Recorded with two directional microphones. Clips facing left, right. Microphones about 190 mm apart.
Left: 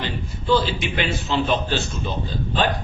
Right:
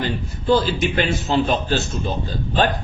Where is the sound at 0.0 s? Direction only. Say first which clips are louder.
Right 4 dB; 45° right (ahead or behind).